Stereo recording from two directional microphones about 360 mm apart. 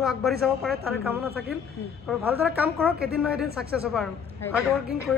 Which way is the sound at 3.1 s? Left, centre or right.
Centre.